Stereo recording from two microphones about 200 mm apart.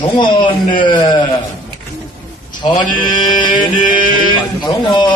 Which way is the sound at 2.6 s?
25° left (ahead or behind).